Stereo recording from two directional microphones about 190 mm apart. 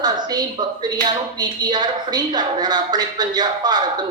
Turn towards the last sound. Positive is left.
turn(degrees=-20)  # may be behind; listen again after turning